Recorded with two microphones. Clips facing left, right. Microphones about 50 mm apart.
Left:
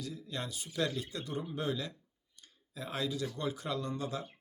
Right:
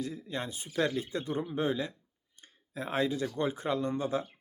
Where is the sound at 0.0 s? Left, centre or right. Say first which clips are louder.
Right 4 dB; right.